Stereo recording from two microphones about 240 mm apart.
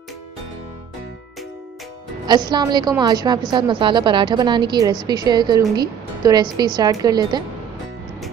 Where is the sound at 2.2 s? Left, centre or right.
Centre.